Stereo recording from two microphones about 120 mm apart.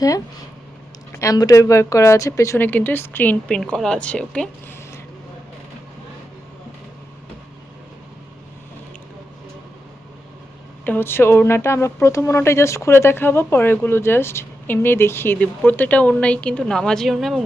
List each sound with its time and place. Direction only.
1.1 s a woman's voice: 25° left (ahead or behind); by 4.4 s 10° left (ahead or behind)
10.8 s speech: 15° left (ahead or behind); by 17.4 s centre (ahead or behind)